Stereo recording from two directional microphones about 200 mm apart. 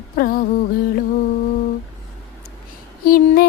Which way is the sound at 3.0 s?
50° left (ahead or behind).